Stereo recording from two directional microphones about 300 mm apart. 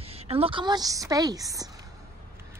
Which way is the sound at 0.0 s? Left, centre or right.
Centre.